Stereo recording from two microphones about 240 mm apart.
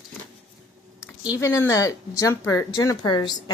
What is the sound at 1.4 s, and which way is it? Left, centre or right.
Speech, centre.